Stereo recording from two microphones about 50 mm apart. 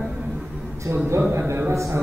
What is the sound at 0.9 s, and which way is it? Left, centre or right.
A man's voice, right.